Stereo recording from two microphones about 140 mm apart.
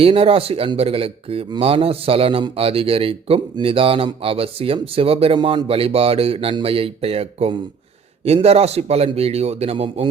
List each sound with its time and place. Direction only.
0.0 s speech: 40° right (ahead or behind)